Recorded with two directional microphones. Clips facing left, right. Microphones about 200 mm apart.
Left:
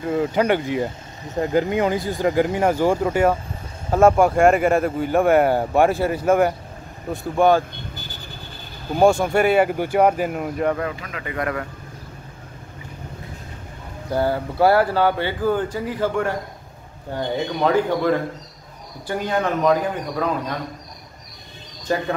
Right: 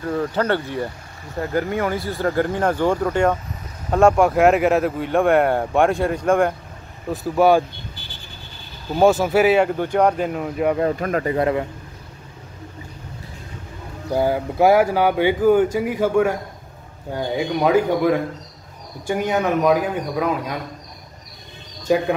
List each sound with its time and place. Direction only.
0.2 s speech: 15° left (ahead or behind)
7.1 s speech: 5° right (ahead or behind)
8.9 s speech: 5° right (ahead or behind)
11.0 s speech: 50° right (ahead or behind)
11.2 s speech: 25° right (ahead or behind)
14.1 s speech: 15° right (ahead or behind)
21.9 s speech: 10° right (ahead or behind)